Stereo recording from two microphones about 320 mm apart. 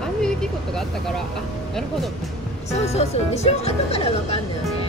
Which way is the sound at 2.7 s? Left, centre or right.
Centre.